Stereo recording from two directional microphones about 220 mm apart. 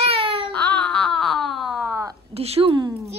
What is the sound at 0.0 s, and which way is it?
Baby cry, 25° right (ahead or behind).